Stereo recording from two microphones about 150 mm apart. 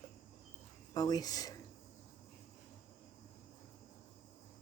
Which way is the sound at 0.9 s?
25° left (ahead or behind).